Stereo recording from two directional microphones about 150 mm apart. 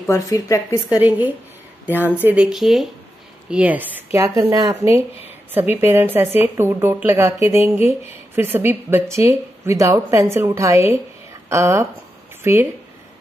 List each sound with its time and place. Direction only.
0.1 s speech: 20° left (ahead or behind)
0.8 s a woman's voice: 10° right (ahead or behind)